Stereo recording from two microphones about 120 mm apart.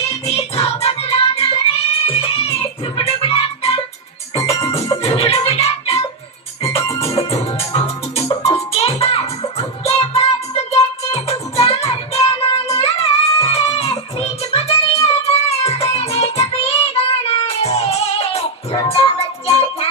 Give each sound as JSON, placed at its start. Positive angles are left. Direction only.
{"t": 0.3, "sound": "music", "side_deg": 55}
{"t": 5.0, "sound": "music", "side_deg": 55}